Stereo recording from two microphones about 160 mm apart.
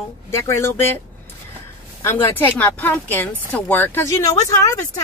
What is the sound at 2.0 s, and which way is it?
Speech, 15° left (ahead or behind).